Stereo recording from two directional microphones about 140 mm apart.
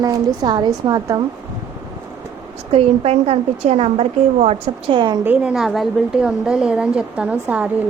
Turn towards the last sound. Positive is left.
turn(degrees=-10)  # may be behind; listen again after turning